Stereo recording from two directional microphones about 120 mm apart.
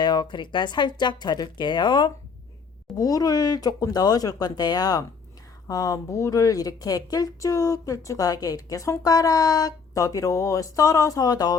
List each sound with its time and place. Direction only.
0.0 s a woman's voice: 40° left (ahead or behind)